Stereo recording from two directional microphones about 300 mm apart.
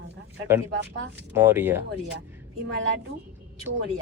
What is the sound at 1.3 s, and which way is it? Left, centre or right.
Speech, centre.